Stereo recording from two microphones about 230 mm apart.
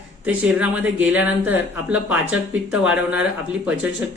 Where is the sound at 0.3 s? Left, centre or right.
Centre.